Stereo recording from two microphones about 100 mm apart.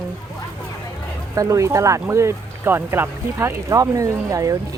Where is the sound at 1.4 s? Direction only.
30° right (ahead or behind).